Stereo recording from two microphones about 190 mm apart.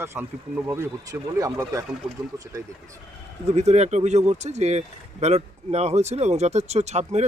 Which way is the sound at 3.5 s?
35° right (ahead or behind).